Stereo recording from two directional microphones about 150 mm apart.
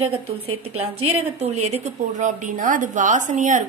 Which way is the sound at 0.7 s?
45° right (ahead or behind).